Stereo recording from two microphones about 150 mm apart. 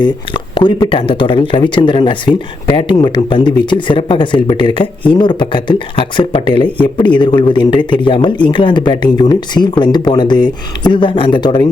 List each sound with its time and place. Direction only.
0.0 s speech: 30° left (ahead or behind)